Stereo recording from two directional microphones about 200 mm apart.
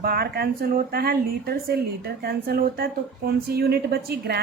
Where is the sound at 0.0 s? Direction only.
50° right (ahead or behind).